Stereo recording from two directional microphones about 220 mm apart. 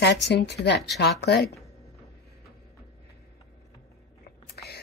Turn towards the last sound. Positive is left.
turn(degrees=50)  # may be behind; listen again after turning